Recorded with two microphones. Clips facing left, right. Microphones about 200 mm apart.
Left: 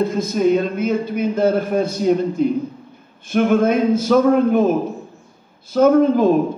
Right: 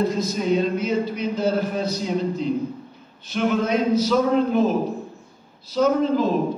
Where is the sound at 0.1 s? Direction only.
50° left (ahead or behind).